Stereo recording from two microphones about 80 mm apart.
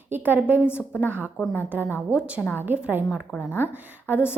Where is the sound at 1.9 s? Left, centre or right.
Left.